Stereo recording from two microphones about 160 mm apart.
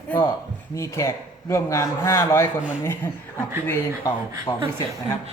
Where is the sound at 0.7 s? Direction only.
20° left (ahead or behind).